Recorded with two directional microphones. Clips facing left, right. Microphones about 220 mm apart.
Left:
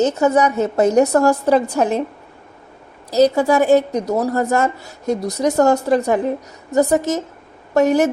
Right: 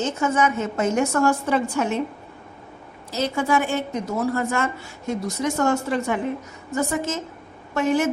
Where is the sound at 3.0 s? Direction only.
40° left (ahead or behind).